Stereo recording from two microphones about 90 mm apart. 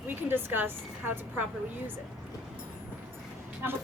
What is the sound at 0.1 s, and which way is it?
A woman's voice, 25° right (ahead or behind).